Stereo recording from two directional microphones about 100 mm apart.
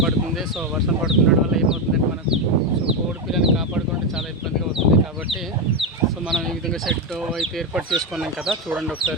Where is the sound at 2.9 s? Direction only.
5° right (ahead or behind).